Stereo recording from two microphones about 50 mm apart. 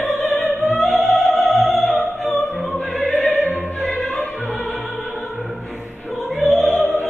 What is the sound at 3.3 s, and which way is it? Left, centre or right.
Music, left.